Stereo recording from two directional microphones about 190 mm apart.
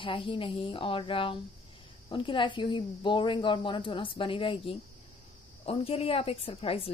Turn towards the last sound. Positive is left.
turn(degrees=30)  # may be behind; listen again after turning